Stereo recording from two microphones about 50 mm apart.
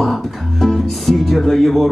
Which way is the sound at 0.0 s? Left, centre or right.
Centre.